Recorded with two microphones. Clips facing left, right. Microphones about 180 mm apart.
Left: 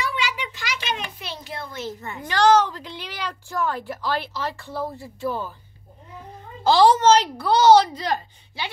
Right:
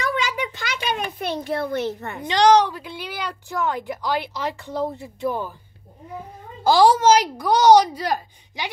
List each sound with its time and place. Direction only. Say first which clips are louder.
0.6 s a sound: right 3 dB; 55° right (ahead or behind)
2.2 s speech: right 2 dB; 20° right (ahead or behind)
6.6 s speech: right 1 dB; 10° right (ahead or behind)